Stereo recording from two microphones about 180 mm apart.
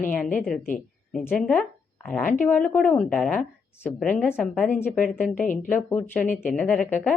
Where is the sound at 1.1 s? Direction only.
Centre (ahead or behind).